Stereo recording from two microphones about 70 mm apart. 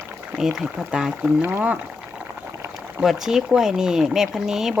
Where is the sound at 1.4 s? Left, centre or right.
Right.